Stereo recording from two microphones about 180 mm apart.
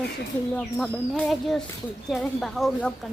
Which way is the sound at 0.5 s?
5° left (ahead or behind).